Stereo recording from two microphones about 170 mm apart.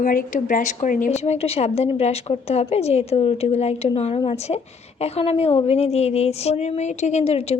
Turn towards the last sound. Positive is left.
turn(degrees=40)  # may be behind; listen again after turning